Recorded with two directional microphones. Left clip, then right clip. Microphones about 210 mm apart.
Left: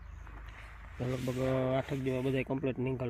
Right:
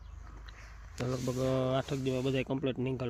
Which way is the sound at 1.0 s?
15° right (ahead or behind).